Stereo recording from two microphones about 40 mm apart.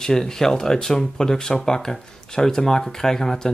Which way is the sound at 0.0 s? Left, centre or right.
Centre.